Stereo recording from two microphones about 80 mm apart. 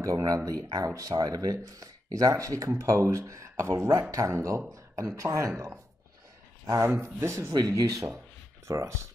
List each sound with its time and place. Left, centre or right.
0.0 s a man's voice: right
6.6 s a man's voice: right